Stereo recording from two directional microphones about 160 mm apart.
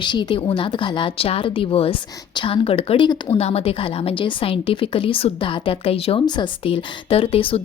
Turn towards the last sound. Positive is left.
turn(degrees=35)  # may be behind; listen again after turning